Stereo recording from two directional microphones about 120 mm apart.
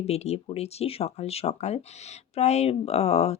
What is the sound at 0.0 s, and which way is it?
Speech, 60° left (ahead or behind).